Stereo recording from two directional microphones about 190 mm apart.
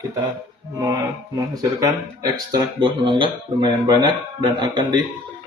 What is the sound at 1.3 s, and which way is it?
Speech, 20° right (ahead or behind).